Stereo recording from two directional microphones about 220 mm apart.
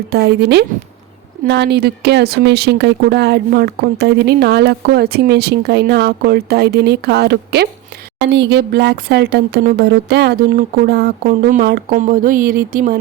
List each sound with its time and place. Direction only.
0.1 s speech: 45° right (ahead or behind)